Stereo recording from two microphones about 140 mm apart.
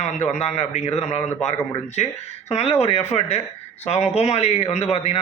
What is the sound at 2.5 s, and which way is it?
A man's voice, 50° left (ahead or behind).